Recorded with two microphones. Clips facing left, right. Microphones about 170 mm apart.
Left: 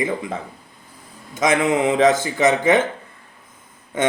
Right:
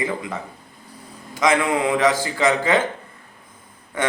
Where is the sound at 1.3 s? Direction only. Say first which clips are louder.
Left 1 dB; 25° left (ahead or behind).